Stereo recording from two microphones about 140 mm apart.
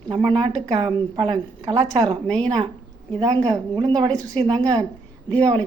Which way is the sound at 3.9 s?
30° right (ahead or behind).